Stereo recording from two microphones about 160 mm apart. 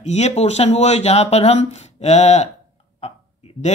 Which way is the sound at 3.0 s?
45° left (ahead or behind).